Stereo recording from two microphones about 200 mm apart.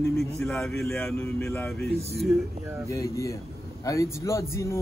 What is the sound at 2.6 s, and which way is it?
Speech, 10° right (ahead or behind).